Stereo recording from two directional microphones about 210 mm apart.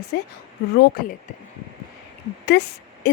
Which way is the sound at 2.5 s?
50° left (ahead or behind).